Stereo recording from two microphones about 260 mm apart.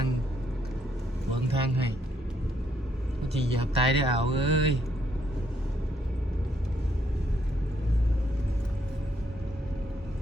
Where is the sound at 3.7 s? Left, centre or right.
Right.